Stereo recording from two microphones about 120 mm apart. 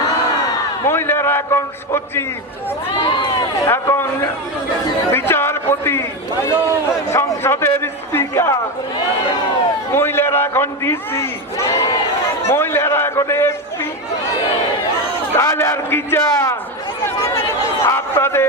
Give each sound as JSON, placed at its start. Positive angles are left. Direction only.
{"t": 0.4, "sound": "a man's voice", "side_deg": 20}
{"t": 3.0, "sound": "speech", "side_deg": 45}
{"t": 3.7, "sound": "a man's voice", "side_deg": 20}
{"t": 7.1, "sound": "a man's voice", "side_deg": 20}
{"t": 9.9, "sound": "a man's voice", "side_deg": 20}
{"t": 15.4, "sound": "a man's voice", "side_deg": 20}
{"t": 17.2, "sound": "chatter", "side_deg": 20}
{"t": 17.8, "sound": "a sound", "side_deg": 20}